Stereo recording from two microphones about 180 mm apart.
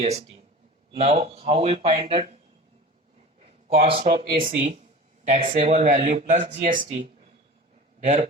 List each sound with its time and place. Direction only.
0.0 s speech: 35° right (ahead or behind)
3.7 s speech: 35° right (ahead or behind)